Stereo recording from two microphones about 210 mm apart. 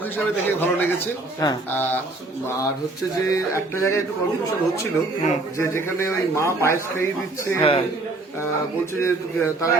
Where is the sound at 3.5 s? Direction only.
15° left (ahead or behind).